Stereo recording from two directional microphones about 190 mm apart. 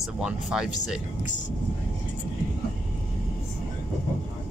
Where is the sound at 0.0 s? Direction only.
5° right (ahead or behind).